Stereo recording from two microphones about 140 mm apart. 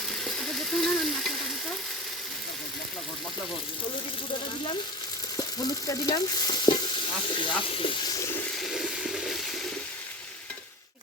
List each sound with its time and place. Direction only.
0.3 s frying: centre (ahead or behind)
5.9 s stir: 30° left (ahead or behind)
8.5 s frying: centre (ahead or behind)